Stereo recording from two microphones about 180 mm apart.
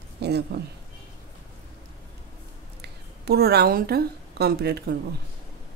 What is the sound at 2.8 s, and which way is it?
Speech, 65° right (ahead or behind).